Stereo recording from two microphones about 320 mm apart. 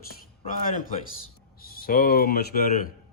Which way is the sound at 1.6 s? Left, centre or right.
Left.